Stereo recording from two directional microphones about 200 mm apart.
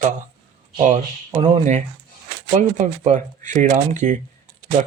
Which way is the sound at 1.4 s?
35° right (ahead or behind).